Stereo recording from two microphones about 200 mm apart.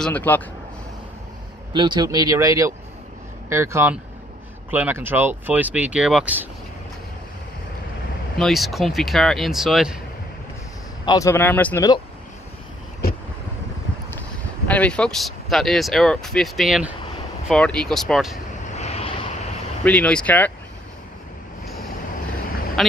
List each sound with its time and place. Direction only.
0.0 s a man's voice: 10° left (ahead or behind)
1.7 s speech: 25° right (ahead or behind); by 6.4 s 5° right (ahead or behind)
8.4 s speech: centre (ahead or behind)
11.1 s a man's voice: 15° left (ahead or behind)
14.7 s speech: 5° left (ahead or behind)
18.8 s vehicle: 30° left (ahead or behind)
19.8 s a man's voice: 5° left (ahead or behind)
22.8 s quack: centre (ahead or behind)